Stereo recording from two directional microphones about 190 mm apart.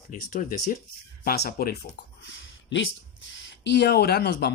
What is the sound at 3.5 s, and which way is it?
Speech, 65° left (ahead or behind).